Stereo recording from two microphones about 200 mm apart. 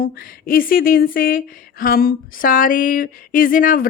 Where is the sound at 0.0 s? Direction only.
45° left (ahead or behind).